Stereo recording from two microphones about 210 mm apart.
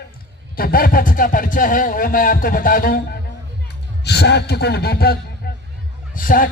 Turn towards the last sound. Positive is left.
turn(degrees=40)  # may be behind; listen again after turning